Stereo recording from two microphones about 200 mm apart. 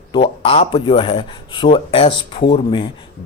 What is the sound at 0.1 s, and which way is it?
Speech, 25° left (ahead or behind).